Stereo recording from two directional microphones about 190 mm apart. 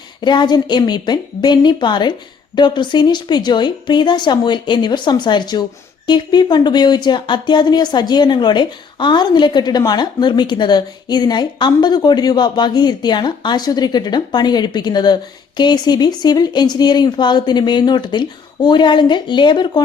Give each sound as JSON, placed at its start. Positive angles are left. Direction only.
{"t": 0.2, "sound": "speech", "side_deg": 25}